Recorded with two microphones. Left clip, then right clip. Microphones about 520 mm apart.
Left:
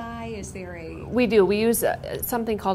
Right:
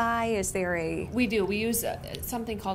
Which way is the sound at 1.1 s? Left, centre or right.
Left.